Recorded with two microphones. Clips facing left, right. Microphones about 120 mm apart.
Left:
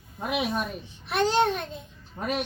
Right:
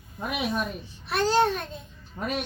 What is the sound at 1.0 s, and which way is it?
Speech, 20° left (ahead or behind).